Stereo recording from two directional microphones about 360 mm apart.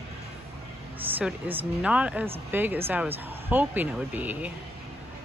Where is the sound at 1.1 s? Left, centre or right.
Centre.